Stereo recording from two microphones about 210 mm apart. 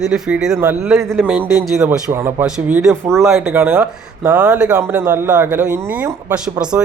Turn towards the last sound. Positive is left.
turn(degrees=-5)  # may be behind; listen again after turning